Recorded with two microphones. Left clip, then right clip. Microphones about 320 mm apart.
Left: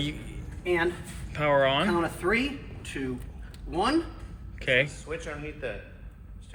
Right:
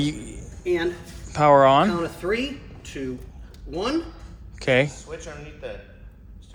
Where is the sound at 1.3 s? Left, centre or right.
Centre.